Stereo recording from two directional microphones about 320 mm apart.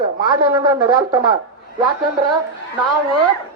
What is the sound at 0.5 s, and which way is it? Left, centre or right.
Speech, centre.